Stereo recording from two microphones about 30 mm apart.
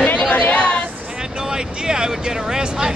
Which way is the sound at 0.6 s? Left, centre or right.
Left.